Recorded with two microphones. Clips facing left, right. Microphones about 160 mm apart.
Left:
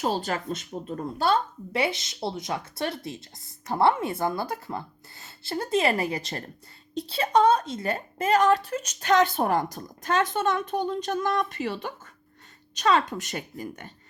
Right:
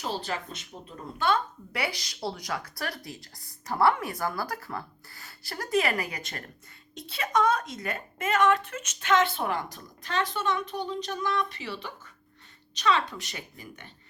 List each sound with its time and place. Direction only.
0.0 s a woman's voice: 45° left (ahead or behind)
1.3 s a woman's voice: 25° left (ahead or behind); by 13.9 s 45° left (ahead or behind)